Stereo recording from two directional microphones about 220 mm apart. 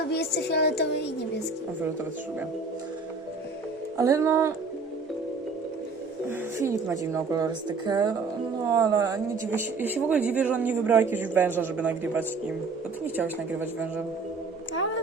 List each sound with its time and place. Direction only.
0.1 s a sound: 50° left (ahead or behind)
3.9 s speech: 15° right (ahead or behind)
6.2 s speech: 10° right (ahead or behind)